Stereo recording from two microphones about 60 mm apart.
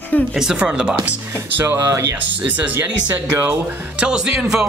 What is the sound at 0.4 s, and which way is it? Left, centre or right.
Speech, centre.